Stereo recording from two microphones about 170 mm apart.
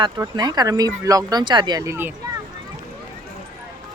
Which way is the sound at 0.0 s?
25° right (ahead or behind).